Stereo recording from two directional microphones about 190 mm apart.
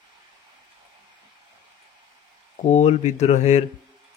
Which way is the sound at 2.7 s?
35° left (ahead or behind).